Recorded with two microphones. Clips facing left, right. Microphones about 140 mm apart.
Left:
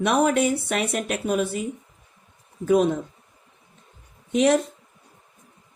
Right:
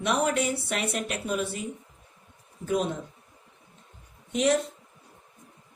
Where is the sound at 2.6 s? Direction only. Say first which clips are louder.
Left 8 dB; 60° left (ahead or behind).